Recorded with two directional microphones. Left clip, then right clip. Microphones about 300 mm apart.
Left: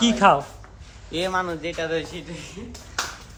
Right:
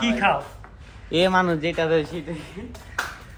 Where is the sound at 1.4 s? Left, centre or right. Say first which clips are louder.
Right 5 dB; right.